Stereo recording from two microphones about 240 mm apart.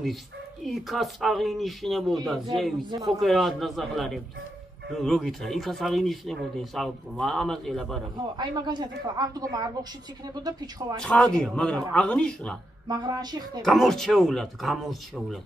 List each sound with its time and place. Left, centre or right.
0.7 s speech: centre
8.4 s speech: centre
11.0 s speech: centre
12.8 s speech: centre
13.7 s speech: centre